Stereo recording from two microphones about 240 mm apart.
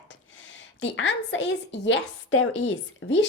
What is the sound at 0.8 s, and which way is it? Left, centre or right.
A woman's voice, left.